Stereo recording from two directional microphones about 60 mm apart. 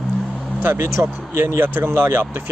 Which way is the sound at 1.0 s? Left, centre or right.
Right.